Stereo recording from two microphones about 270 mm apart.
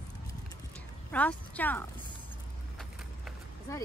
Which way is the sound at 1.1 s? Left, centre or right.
Centre.